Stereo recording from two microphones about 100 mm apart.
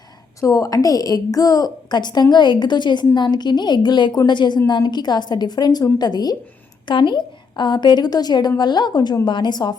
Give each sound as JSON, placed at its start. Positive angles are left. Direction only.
{"t": 0.3, "sound": "a woman's voice", "side_deg": 35}